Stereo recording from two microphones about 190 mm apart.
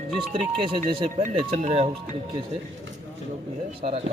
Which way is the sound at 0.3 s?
25° right (ahead or behind).